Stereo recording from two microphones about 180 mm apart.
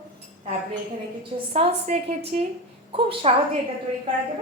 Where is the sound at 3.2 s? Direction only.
35° right (ahead or behind).